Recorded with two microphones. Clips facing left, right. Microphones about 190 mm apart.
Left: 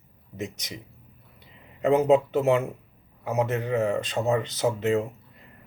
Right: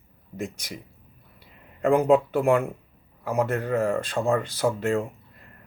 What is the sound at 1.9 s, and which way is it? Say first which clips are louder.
Speech: even; 20° left (ahead or behind).